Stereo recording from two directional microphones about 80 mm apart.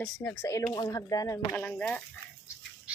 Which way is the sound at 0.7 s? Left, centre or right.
Left.